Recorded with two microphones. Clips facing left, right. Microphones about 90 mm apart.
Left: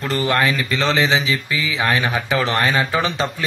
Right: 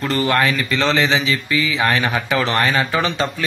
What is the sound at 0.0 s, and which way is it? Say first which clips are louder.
Speech: right 1 dB; 15° left (ahead or behind).